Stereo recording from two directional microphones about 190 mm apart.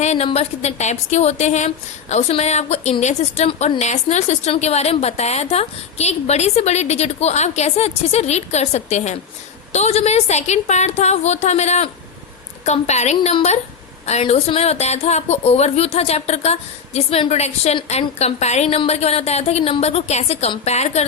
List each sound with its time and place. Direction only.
0.0 s a woman's voice: 35° left (ahead or behind)